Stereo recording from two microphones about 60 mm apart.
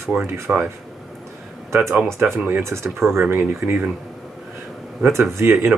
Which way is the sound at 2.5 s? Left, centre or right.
Right.